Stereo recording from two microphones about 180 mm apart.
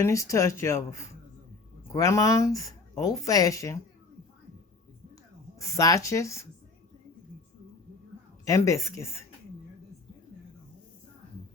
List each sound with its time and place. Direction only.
0.0 s speech: 15° left (ahead or behind)
5.5 s speech: 20° left (ahead or behind)
8.4 s speech: 15° left (ahead or behind)